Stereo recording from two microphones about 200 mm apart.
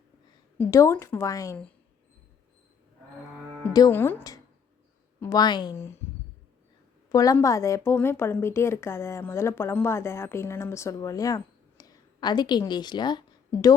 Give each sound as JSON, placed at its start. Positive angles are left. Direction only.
{"t": 0.6, "sound": "speech", "side_deg": 15}
{"t": 3.7, "sound": "a woman's voice", "side_deg": 15}
{"t": 7.1, "sound": "speech", "side_deg": 15}